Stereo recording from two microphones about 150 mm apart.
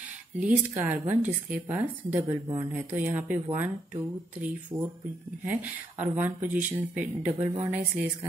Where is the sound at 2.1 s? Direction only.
25° right (ahead or behind).